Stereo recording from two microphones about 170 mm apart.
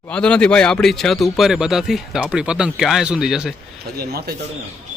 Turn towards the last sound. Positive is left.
turn(degrees=-70)  # may be behind; listen again after turning